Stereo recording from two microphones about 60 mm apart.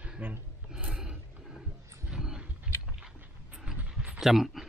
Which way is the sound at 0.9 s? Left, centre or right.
Centre.